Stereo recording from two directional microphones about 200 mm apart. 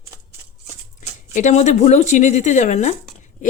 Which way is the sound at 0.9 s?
40° left (ahead or behind).